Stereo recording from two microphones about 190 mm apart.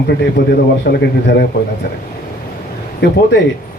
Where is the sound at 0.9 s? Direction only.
55° left (ahead or behind).